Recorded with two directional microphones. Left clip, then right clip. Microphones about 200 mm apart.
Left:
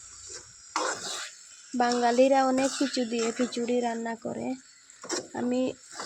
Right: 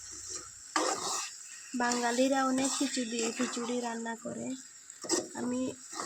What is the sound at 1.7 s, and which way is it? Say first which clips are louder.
Speech: left 7 dB; 35° left (ahead or behind).